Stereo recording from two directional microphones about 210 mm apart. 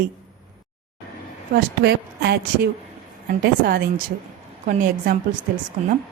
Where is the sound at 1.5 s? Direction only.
50° right (ahead or behind).